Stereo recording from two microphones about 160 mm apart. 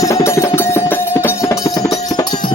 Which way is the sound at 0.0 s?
20° left (ahead or behind).